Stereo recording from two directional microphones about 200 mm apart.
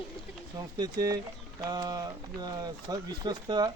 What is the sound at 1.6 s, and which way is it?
Speech, 20° right (ahead or behind).